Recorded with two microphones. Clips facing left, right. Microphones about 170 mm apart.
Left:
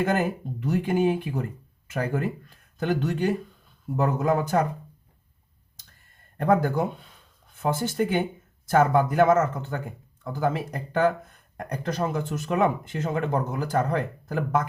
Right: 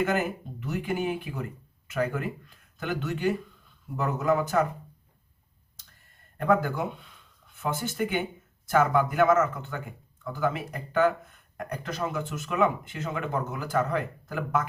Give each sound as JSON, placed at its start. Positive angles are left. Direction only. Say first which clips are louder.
{"t": 0.0, "sound": "speech", "louder": "left 2 dB", "side_deg": 40}
{"t": 6.3, "sound": "speech", "louder": "left 3 dB", "side_deg": 40}